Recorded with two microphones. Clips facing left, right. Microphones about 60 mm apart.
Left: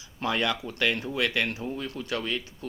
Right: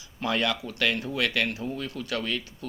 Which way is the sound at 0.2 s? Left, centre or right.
Left.